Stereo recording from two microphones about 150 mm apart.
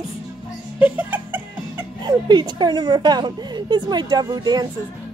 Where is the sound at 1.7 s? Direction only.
30° right (ahead or behind).